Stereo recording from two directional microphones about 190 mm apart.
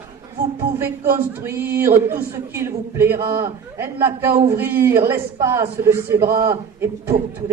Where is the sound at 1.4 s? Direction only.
15° right (ahead or behind).